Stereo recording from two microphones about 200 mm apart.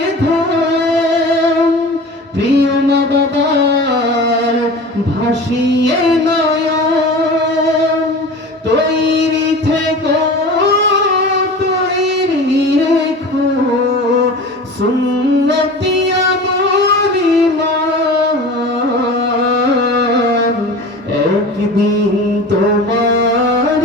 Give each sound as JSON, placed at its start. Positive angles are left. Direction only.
{"t": 2.6, "sound": "music", "side_deg": -60}